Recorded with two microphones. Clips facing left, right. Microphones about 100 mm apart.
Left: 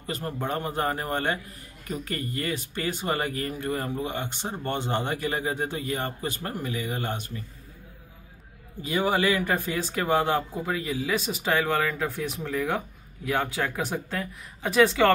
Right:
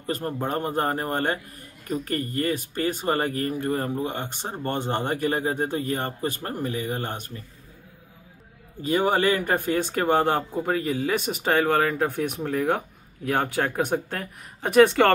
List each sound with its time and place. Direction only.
0.0 s a man's voice: 40° right (ahead or behind)
8.8 s speech: 45° right (ahead or behind)
12.4 s speech: 35° right (ahead or behind)
13.2 s speech: 50° right (ahead or behind)